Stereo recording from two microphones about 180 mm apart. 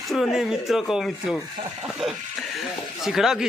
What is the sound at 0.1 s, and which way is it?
Speech, centre (ahead or behind).